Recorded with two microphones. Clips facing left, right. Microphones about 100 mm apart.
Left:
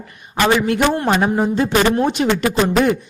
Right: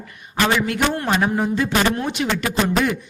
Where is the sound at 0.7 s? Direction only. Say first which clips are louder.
Left 4 dB; 20° left (ahead or behind).